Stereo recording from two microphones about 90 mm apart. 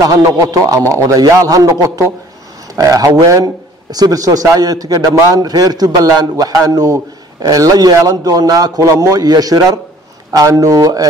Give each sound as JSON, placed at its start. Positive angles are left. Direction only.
{"t": 0.0, "sound": "a man's voice", "side_deg": -40}